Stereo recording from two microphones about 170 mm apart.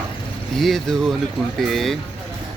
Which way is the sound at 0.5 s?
Centre (ahead or behind).